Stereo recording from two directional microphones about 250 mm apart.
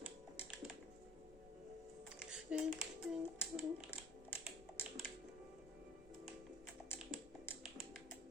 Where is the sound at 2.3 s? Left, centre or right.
Centre.